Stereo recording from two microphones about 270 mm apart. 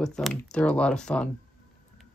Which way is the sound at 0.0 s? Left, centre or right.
Centre.